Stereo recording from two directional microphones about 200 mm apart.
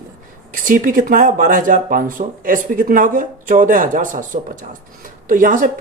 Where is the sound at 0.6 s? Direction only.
45° right (ahead or behind).